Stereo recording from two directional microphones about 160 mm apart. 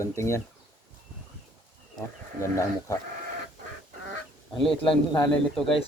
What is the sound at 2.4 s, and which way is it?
Speech, 20° left (ahead or behind).